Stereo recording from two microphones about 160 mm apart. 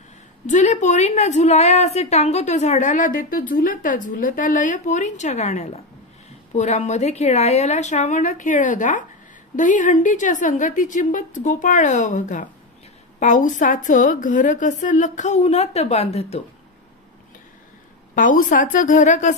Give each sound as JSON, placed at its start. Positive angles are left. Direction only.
{"t": 0.5, "sound": "a woman's voice", "side_deg": 50}
{"t": 18.1, "sound": "a woman's voice", "side_deg": 55}